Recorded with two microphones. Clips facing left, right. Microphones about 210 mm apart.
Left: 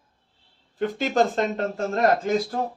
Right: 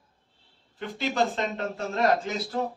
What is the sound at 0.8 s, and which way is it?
Speech, 45° left (ahead or behind).